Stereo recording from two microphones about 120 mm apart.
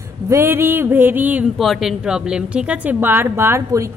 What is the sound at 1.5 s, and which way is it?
Speech, centre (ahead or behind).